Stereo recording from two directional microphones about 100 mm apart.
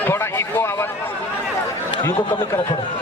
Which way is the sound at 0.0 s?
25° left (ahead or behind).